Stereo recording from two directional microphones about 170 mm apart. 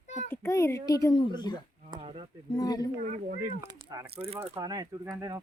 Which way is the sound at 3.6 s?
15° right (ahead or behind).